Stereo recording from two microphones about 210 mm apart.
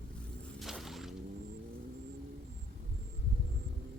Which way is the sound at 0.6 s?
Centre (ahead or behind).